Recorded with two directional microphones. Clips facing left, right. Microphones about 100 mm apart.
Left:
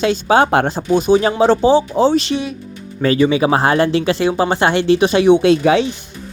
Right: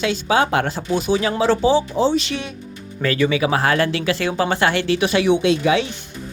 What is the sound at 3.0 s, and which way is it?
Speech, 25° left (ahead or behind).